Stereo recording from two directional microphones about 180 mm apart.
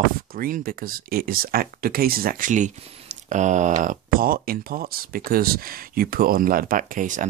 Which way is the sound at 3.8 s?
55° right (ahead or behind).